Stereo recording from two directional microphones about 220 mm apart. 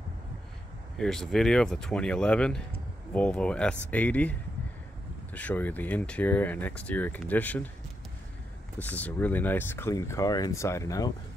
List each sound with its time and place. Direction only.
0.9 s speech: centre (ahead or behind)
8.7 s speech: 5° left (ahead or behind)